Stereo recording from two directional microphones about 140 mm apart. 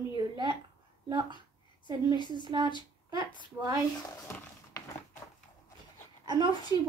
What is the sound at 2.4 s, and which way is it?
Speech, 30° right (ahead or behind).